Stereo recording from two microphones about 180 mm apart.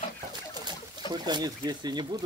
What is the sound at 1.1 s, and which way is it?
Speech, 25° right (ahead or behind).